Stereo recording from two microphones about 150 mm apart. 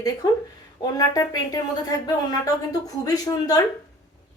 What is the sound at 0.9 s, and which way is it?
Speech, 25° left (ahead or behind).